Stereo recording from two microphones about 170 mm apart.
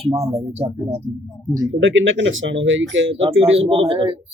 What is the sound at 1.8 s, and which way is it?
Speech, 90° right.